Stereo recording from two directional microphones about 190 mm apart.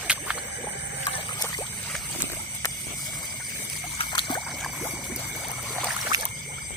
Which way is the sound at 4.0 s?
25° left (ahead or behind).